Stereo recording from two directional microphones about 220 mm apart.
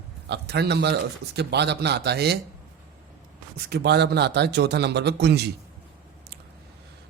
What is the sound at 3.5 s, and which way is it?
A man's voice, 50° right (ahead or behind).